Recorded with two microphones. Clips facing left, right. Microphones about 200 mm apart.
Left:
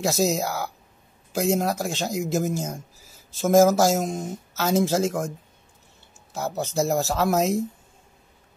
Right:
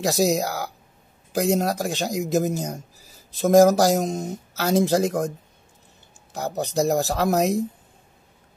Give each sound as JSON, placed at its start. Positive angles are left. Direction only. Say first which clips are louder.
{"t": 0.0, "sound": "speech", "louder": "right 2 dB", "side_deg": -15}
{"t": 6.6, "sound": "speech", "louder": "right 2 dB", "side_deg": -15}